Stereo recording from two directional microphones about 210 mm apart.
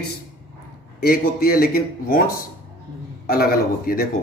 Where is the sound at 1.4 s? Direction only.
45° left (ahead or behind).